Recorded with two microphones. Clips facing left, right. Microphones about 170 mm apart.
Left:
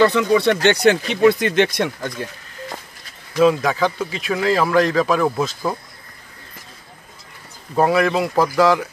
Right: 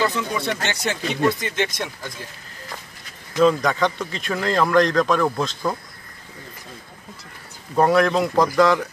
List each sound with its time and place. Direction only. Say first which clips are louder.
0.0 s speech: left 9 dB; 70° left (ahead or behind)
3.3 s a man's voice: left 2 dB; 5° left (ahead or behind)
7.7 s a man's voice: even; 5° left (ahead or behind)